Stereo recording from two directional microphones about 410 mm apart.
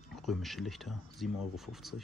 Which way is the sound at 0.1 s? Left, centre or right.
Centre.